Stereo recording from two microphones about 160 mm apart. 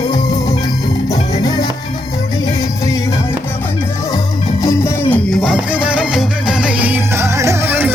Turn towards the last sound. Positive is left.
turn(degrees=-15)  # may be behind; listen again after turning